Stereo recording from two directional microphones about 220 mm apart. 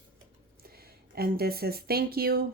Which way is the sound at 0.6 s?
45° right (ahead or behind).